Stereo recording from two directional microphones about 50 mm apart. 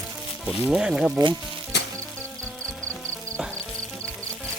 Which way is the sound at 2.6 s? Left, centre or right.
Left.